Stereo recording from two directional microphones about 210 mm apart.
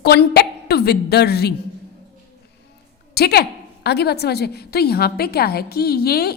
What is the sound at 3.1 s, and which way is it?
A woman's voice, 50° left (ahead or behind).